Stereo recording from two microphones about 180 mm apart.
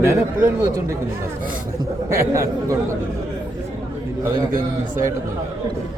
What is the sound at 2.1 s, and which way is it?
Speech, 15° right (ahead or behind).